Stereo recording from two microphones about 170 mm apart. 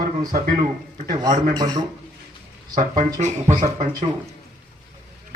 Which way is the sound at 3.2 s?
45° right (ahead or behind).